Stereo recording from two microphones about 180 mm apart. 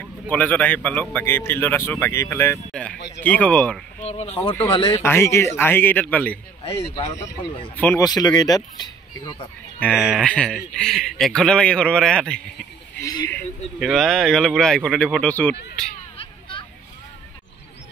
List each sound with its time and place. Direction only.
0.0 s a man's voice: 10° left (ahead or behind)
4.0 s speech: 35° left (ahead or behind)
5.0 s a man's voice: 15° left (ahead or behind)
7.1 s a man's voice: 20° left (ahead or behind)
8.0 s speech: 20° left (ahead or behind)
9.8 s speech: 5° left (ahead or behind)
16.2 s a sound: 30° left (ahead or behind)